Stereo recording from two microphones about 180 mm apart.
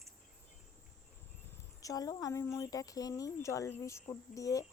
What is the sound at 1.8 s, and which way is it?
Speech, 20° left (ahead or behind).